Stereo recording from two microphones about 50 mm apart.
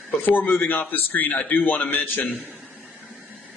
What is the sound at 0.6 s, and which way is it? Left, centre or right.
A man's voice, left.